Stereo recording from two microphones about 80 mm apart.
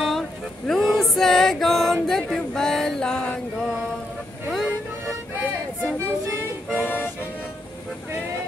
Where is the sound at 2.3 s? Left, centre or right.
Centre.